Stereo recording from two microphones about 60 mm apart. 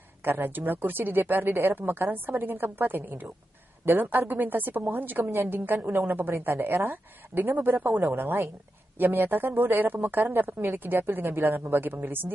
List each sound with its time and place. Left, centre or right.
0.2 s speech: right
5.2 s a woman's voice: right
8.0 s a woman's voice: right
8.9 s speech: right